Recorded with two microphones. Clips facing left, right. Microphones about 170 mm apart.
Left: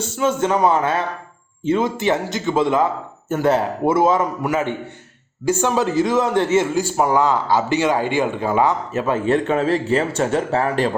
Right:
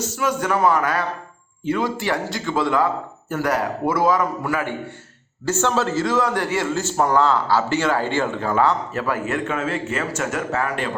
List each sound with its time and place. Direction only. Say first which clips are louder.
0.0 s a man's voice: left 4 dB; 25° left (ahead or behind)